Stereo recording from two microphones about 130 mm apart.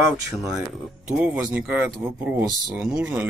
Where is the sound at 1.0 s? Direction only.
10° right (ahead or behind).